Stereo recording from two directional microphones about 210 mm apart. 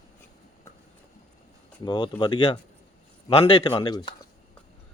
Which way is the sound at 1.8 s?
20° left (ahead or behind).